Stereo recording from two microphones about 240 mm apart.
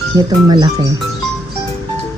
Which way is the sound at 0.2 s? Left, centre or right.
Centre.